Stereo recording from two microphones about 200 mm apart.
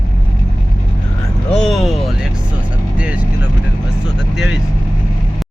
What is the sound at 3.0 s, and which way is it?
Vehicle, 5° right (ahead or behind).